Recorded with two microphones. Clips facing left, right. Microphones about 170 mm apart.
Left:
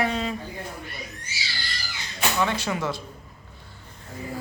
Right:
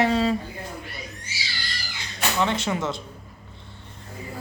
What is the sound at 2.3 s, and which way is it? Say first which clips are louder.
Speech: right 2 dB; 25° right (ahead or behind).